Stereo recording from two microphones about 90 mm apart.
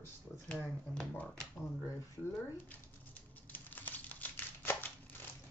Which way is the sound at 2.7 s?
20° left (ahead or behind).